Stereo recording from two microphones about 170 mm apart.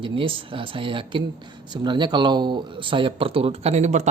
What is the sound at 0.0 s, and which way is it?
Speech, 30° right (ahead or behind).